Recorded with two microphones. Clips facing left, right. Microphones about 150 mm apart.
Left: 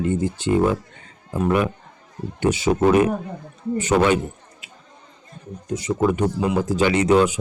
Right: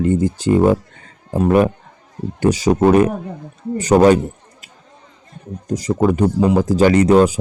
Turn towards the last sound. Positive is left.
turn(degrees=-35)  # may be behind; listen again after turning